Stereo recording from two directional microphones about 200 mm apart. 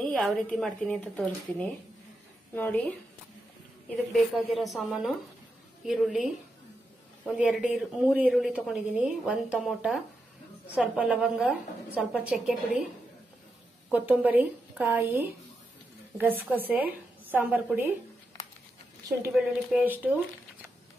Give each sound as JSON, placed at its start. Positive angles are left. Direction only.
{"t": 0.0, "sound": "speech", "side_deg": 5}
{"t": 3.9, "sound": "speech", "side_deg": 0}
{"t": 7.2, "sound": "speech", "side_deg": 0}
{"t": 13.8, "sound": "a woman's voice", "side_deg": -5}
{"t": 19.3, "sound": "a woman's voice", "side_deg": -5}